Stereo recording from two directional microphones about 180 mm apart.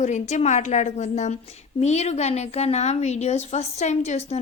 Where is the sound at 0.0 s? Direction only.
40° left (ahead or behind).